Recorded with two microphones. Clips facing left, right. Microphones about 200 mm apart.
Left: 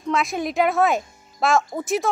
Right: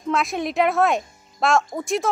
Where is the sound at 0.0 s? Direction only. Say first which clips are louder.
Even; centre (ahead or behind).